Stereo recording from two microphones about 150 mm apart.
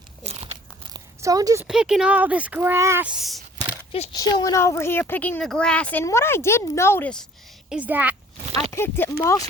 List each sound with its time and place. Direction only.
0.3 s crumpling: 45° right (ahead or behind)
0.9 s a sound: 25° right (ahead or behind)
1.6 s speech: 5° right (ahead or behind)
4.1 s speech: 25° left (ahead or behind)
7.7 s speech: 10° right (ahead or behind)
8.7 s speech: 15° left (ahead or behind)